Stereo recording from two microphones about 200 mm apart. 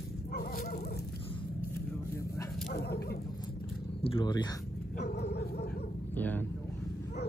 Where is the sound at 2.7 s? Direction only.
50° left (ahead or behind).